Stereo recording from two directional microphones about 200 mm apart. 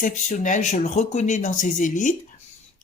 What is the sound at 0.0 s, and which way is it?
A man's voice, 40° left (ahead or behind).